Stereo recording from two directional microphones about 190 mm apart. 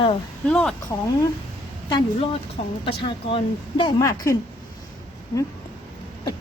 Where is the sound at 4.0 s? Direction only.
15° left (ahead or behind).